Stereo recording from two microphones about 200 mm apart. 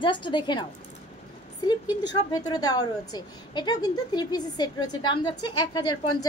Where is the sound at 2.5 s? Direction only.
20° left (ahead or behind).